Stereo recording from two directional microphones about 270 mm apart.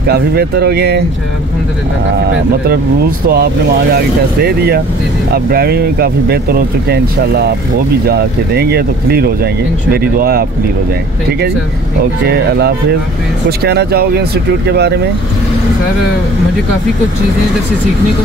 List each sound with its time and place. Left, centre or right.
0.1 s speech: right
4.5 s speech: right
12.3 s speech: right